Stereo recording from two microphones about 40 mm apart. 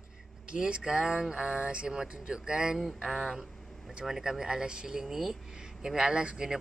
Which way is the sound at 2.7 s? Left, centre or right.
Centre.